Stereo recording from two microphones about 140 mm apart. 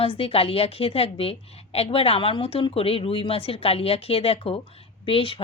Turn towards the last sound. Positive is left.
turn(degrees=40)  # may be behind; listen again after turning